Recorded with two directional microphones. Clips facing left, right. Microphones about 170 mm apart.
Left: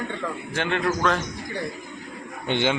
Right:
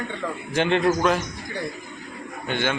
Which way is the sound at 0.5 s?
20° right (ahead or behind).